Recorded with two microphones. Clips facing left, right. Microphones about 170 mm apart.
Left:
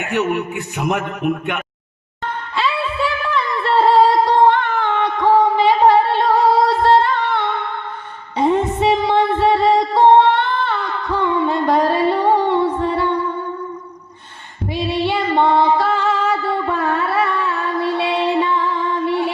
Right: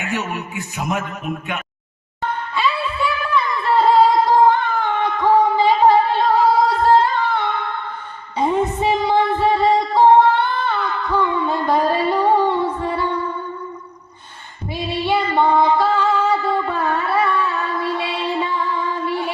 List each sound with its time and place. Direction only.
0.0 s a man's voice: 60° left (ahead or behind)
2.6 s music: 80° left
6.8 s singing: 80° left
8.4 s music: 80° left
14.7 s female singing: 80° left